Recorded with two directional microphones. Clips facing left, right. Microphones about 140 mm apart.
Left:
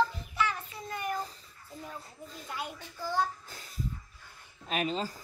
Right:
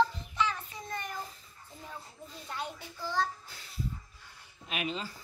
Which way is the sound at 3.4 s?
45° left (ahead or behind).